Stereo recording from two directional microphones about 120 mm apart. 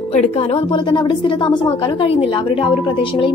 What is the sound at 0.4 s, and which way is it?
A woman's voice, 45° left (ahead or behind).